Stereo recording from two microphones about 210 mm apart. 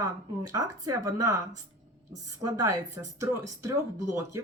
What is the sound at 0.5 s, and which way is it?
Speech, 15° right (ahead or behind).